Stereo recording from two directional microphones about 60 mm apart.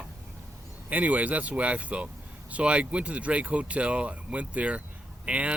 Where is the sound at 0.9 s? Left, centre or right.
Right.